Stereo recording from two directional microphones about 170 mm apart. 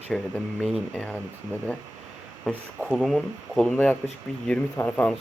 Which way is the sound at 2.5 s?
5° right (ahead or behind).